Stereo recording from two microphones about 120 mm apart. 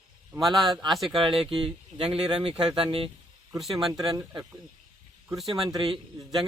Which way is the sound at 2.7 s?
50° right (ahead or behind).